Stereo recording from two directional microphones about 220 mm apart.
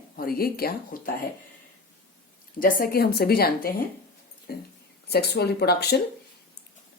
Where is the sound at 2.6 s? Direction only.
40° left (ahead or behind).